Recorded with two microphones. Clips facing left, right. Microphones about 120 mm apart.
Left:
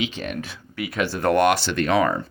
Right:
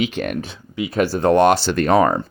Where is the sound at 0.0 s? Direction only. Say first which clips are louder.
Right 6 dB; 55° right (ahead or behind).